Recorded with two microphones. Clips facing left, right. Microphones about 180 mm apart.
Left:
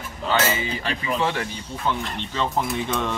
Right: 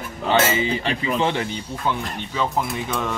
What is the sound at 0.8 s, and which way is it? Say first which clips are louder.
Speech: right 3 dB; 25° right (ahead or behind).